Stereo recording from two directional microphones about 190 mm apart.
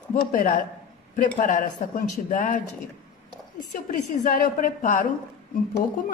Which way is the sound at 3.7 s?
45° left (ahead or behind).